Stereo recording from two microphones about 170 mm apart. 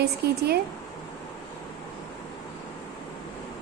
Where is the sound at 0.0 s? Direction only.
70° right (ahead or behind).